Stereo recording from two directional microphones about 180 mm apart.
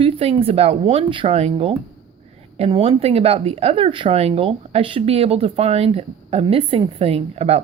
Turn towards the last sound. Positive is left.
turn(degrees=-35)  # may be behind; listen again after turning